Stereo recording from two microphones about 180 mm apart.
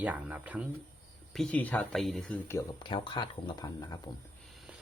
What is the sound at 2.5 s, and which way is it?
Speech, 20° left (ahead or behind).